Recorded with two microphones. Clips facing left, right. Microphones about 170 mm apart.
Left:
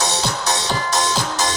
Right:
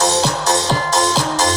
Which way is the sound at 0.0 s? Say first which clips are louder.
Right 6 dB; 40° right (ahead or behind).